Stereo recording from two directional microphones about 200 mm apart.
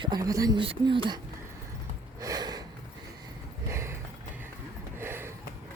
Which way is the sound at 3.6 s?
15° right (ahead or behind).